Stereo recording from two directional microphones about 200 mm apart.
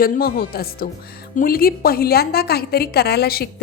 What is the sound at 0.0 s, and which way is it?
A woman's voice, 45° left (ahead or behind).